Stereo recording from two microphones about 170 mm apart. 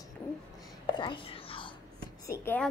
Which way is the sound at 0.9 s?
30° left (ahead or behind).